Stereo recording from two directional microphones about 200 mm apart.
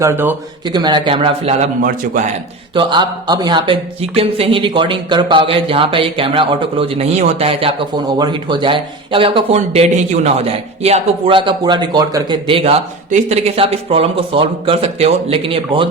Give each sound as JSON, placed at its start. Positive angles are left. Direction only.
{"t": 0.0, "sound": "speech", "side_deg": -10}
{"t": 0.7, "sound": "speech", "side_deg": -20}
{"t": 2.7, "sound": "speech", "side_deg": -25}